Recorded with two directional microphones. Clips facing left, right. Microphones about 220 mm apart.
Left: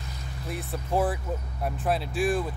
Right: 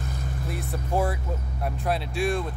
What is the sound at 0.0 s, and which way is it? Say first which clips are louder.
Vehicle: right 7 dB; 50° right (ahead or behind).